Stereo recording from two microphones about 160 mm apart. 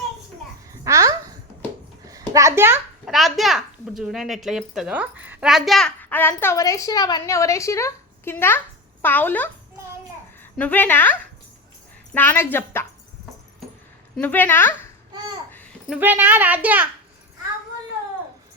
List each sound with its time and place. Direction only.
0.7 s babbling: 20° right (ahead or behind)
2.0 s a child's voice: 20° right (ahead or behind)
3.1 s a child's voice: centre (ahead or behind)
6.0 s a woman's voice: 10° left (ahead or behind)
10.6 s a woman's voice: 10° left (ahead or behind)
14.2 s a woman's voice: 10° left (ahead or behind)
15.9 s a child's voice: 10° right (ahead or behind)